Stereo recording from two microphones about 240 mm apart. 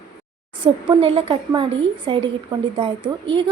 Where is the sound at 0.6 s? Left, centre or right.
Right.